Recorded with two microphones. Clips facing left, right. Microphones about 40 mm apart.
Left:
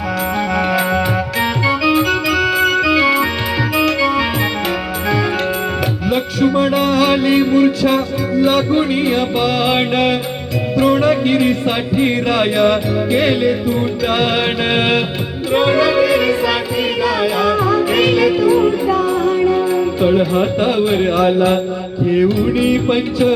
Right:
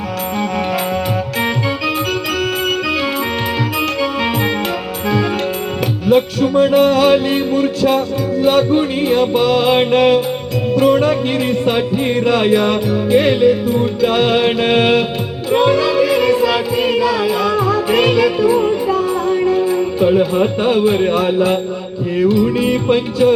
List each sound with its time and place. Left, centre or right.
6.1 s music: centre
7.3 s music: centre
16.0 s music: centre